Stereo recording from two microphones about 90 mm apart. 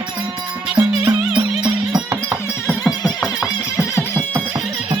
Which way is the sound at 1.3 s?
60° right (ahead or behind).